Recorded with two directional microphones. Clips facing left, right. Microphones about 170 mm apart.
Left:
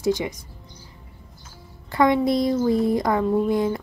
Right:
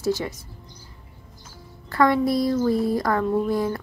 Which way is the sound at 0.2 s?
15° left (ahead or behind).